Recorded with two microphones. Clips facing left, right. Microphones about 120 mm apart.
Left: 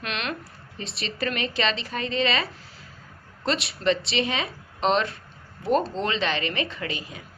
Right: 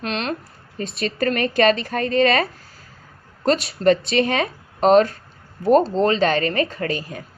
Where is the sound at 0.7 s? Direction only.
50° right (ahead or behind).